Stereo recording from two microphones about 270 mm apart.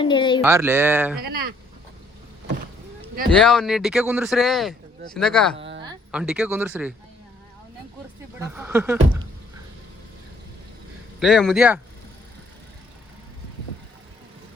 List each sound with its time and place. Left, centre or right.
0.0 s speech: centre
0.4 s speech: centre
1.3 s speech: right
3.2 s speech: centre
8.4 s speech: centre
11.2 s speech: centre